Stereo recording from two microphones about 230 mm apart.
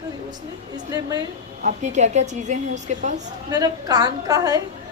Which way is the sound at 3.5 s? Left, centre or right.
Centre.